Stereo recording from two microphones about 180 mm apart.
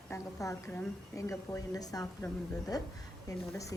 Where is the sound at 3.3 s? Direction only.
15° left (ahead or behind).